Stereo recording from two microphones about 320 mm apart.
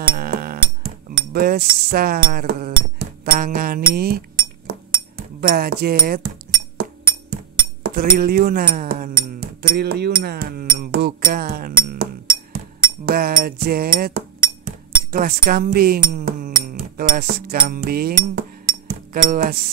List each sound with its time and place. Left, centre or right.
0.1 s music: right
1.1 s cutlery: right
7.8 s speech: right
15.0 s cutlery: right